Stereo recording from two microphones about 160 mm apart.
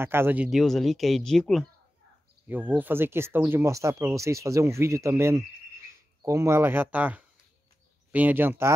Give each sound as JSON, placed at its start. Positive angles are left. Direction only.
{"t": 0.0, "sound": "speech", "side_deg": -15}
{"t": 2.4, "sound": "speech", "side_deg": -10}